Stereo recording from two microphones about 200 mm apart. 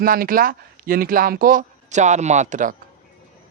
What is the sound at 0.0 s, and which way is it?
Speech, 45° right (ahead or behind).